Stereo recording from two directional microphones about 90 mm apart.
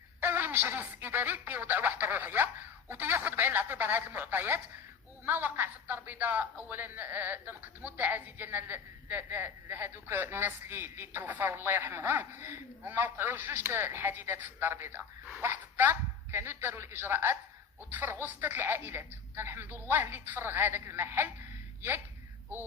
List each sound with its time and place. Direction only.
0.2 s a woman's voice: 20° right (ahead or behind)